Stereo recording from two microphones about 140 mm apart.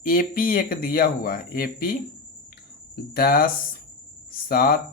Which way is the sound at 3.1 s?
90° left.